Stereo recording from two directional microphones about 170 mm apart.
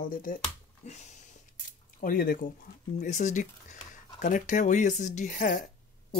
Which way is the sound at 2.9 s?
45° left (ahead or behind).